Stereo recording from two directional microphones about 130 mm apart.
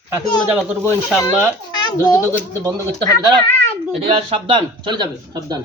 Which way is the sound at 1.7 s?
35° left (ahead or behind).